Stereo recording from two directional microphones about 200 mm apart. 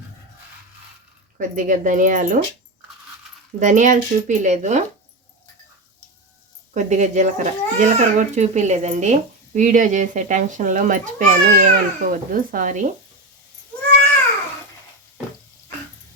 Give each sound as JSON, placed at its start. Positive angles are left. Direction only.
{"t": 1.4, "sound": "a child's voice", "side_deg": -40}
{"t": 3.6, "sound": "a child's voice", "side_deg": -40}
{"t": 6.7, "sound": "a child's voice", "side_deg": -35}